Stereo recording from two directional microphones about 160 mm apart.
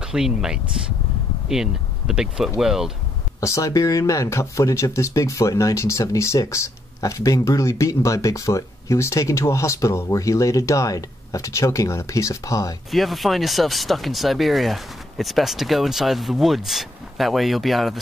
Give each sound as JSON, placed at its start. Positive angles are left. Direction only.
{"t": 0.0, "sound": "speech", "side_deg": -5}
{"t": 3.3, "sound": "speech", "side_deg": 20}
{"t": 12.9, "sound": "speech", "side_deg": 0}